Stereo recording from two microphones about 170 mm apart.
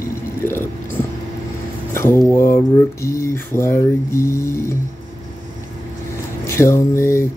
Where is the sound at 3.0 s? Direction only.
15° left (ahead or behind).